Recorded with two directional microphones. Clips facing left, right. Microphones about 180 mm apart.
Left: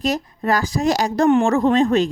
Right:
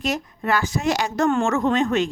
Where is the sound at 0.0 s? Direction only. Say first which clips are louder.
Left 4 dB; 35° left (ahead or behind).